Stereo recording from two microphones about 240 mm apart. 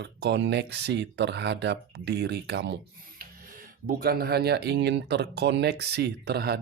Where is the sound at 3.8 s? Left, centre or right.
Right.